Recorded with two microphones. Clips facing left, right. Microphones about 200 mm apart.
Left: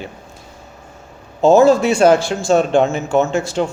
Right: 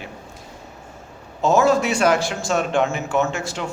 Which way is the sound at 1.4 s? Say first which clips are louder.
Left 7 dB; 30° left (ahead or behind).